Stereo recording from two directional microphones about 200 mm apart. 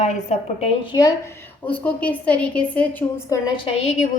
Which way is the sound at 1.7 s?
5° left (ahead or behind).